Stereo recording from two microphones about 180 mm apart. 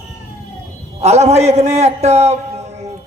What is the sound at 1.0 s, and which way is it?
A man's voice, 35° right (ahead or behind).